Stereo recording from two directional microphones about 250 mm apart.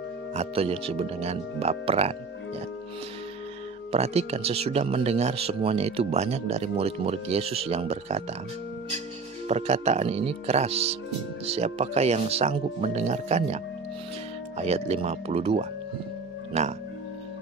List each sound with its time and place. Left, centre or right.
0.3 s speech: right
3.9 s speech: right
9.5 s speech: right
14.6 s speech: right